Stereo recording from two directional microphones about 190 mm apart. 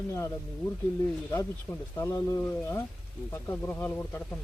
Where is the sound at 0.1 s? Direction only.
15° left (ahead or behind).